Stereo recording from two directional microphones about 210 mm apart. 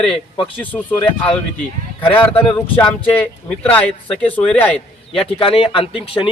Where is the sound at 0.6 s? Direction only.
10° left (ahead or behind).